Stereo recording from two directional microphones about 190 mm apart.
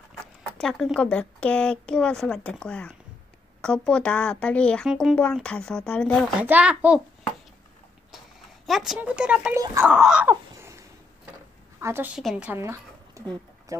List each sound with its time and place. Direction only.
0.6 s speech: 5° left (ahead or behind)
6.4 s a child's voice: 5° right (ahead or behind)
8.6 s speech: centre (ahead or behind)
10.3 s a sound: 15° right (ahead or behind)
11.8 s a woman's voice: 10° right (ahead or behind)